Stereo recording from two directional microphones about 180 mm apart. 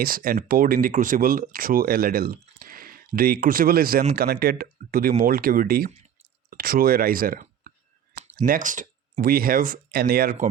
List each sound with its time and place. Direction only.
0.0 s speech: 55° right (ahead or behind)